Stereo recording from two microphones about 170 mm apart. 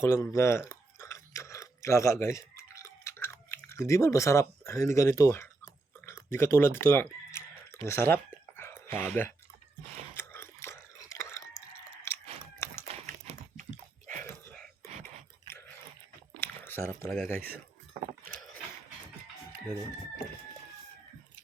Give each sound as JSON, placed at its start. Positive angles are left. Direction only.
{"t": 0.0, "sound": "chewing", "side_deg": 15}
{"t": 7.9, "sound": "speech", "side_deg": 15}
{"t": 8.5, "sound": "whispering", "side_deg": 15}
{"t": 10.2, "sound": "a sound", "side_deg": 15}
{"t": 12.0, "sound": "biting", "side_deg": 15}
{"t": 12.9, "sound": "dog", "side_deg": -40}
{"t": 14.4, "sound": "a sound", "side_deg": 5}
{"t": 16.4, "sound": "a sound", "side_deg": 15}
{"t": 17.1, "sound": "speech", "side_deg": 10}